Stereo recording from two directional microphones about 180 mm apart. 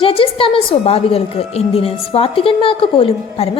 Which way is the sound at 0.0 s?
30° left (ahead or behind).